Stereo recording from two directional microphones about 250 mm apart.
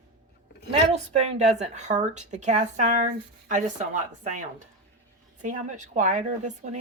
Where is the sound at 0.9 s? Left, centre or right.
Right.